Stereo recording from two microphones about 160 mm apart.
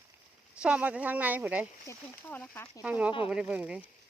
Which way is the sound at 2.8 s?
10° right (ahead or behind).